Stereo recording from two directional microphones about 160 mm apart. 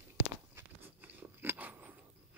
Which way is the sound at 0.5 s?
10° right (ahead or behind).